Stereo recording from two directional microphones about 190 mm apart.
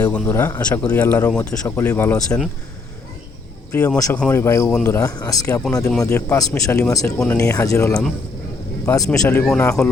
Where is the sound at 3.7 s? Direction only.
5° left (ahead or behind).